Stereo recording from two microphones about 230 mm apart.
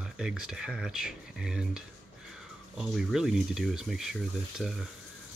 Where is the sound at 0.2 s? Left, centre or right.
Centre.